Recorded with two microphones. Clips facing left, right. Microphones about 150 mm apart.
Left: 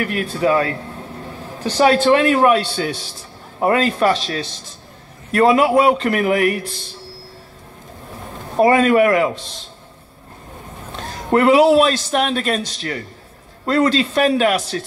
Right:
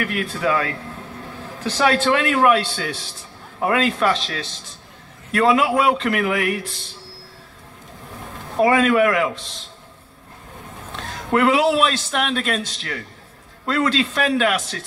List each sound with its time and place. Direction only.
0.0 s a man's voice: 35° left (ahead or behind)
8.5 s a man's voice: 40° left (ahead or behind)
11.0 s a man's voice: 35° left (ahead or behind)